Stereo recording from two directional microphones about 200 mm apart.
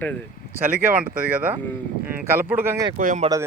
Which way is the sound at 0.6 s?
10° right (ahead or behind).